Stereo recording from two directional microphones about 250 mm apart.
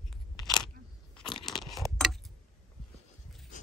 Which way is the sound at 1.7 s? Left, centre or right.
Centre.